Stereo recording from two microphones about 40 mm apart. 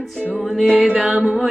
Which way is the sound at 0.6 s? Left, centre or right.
Centre.